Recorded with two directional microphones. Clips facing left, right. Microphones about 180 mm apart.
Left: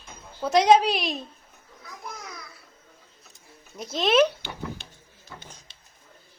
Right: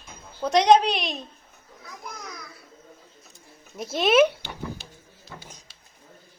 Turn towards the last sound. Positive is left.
turn(degrees=-10)  # may be behind; listen again after turning